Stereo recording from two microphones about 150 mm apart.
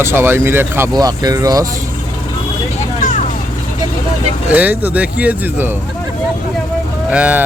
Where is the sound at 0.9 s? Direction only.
25° right (ahead or behind).